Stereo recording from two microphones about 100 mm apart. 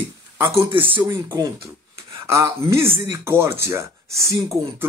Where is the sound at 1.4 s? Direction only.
40° right (ahead or behind).